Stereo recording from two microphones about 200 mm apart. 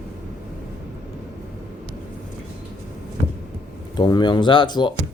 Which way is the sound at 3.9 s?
20° left (ahead or behind).